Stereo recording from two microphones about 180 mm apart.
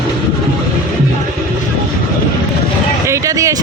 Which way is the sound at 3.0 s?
15° right (ahead or behind).